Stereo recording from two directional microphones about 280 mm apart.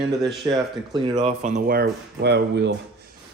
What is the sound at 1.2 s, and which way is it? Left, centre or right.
Speech, right.